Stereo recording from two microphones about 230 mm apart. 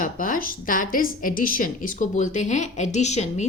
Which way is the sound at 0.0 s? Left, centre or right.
Left.